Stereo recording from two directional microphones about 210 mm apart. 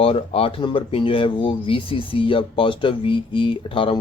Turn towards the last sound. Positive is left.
turn(degrees=25)  # may be behind; listen again after turning